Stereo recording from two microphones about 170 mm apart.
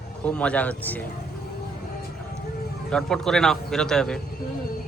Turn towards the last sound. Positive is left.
turn(degrees=5)  # may be behind; listen again after turning